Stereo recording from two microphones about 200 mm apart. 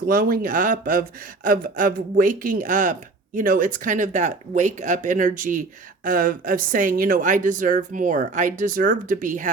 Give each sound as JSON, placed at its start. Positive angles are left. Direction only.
{"t": 0.1, "sound": "speech", "side_deg": -45}